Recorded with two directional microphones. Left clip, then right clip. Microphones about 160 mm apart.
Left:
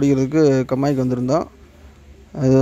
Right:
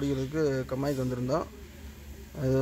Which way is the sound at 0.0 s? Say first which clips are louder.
Left 13 dB; 50° left (ahead or behind).